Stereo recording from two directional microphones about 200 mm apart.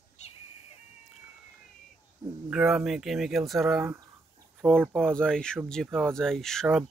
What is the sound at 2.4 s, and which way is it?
Speech, 5° right (ahead or behind).